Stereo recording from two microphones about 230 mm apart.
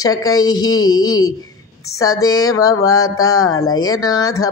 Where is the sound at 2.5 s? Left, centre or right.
Centre.